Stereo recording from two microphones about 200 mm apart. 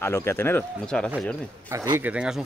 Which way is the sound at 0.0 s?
10° left (ahead or behind).